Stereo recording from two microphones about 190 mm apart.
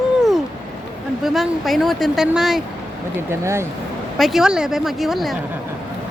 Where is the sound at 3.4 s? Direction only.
15° right (ahead or behind).